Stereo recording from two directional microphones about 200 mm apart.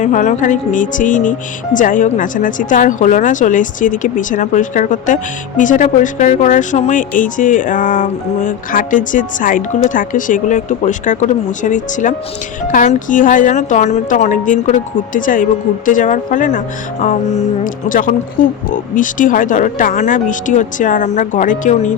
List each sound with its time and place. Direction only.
0.0 s speech: 40° left (ahead or behind)